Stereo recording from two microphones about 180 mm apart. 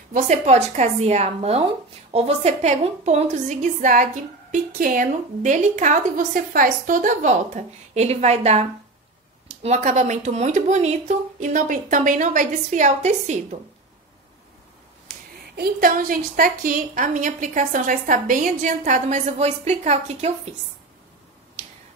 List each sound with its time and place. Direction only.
0.1 s a woman's voice: 40° right (ahead or behind)
15.0 s a woman's voice: 55° right (ahead or behind); by 20.3 s 40° right (ahead or behind)